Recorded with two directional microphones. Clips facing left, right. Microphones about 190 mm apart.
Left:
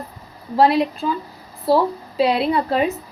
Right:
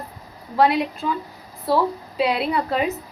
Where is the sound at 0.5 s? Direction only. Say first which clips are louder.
Left 2 dB; 35° left (ahead or behind).